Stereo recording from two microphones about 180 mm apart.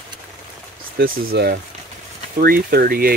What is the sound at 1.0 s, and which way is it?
Speech, 55° right (ahead or behind).